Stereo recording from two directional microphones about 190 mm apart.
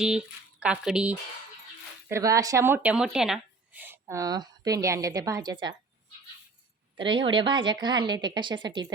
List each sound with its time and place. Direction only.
0.0 s speech: 5° right (ahead or behind)
2.0 s speech: 15° right (ahead or behind)
6.9 s speech: 25° right (ahead or behind)